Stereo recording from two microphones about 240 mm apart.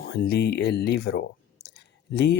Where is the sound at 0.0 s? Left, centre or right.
Left.